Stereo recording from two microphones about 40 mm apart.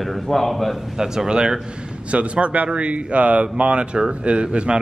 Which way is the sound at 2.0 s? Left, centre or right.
Right.